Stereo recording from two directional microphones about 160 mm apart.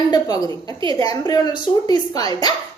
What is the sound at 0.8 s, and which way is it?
Speech, 30° right (ahead or behind).